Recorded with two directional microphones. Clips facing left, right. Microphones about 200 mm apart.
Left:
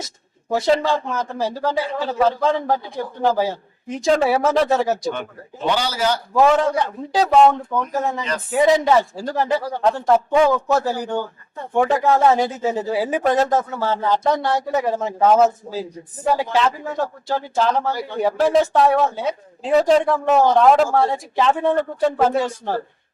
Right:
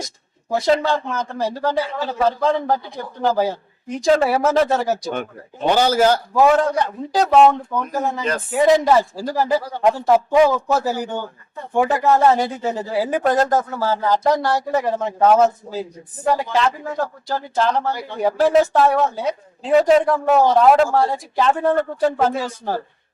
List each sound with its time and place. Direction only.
0.5 s a man's voice: centre (ahead or behind)
5.7 s a man's voice: 50° right (ahead or behind)
6.3 s a man's voice: 5° right (ahead or behind)